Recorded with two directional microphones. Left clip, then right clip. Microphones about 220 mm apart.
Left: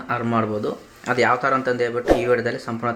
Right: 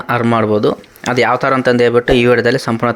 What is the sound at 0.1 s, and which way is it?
Speech, 40° right (ahead or behind).